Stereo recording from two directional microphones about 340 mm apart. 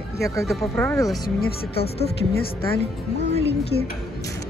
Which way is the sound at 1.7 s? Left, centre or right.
Left.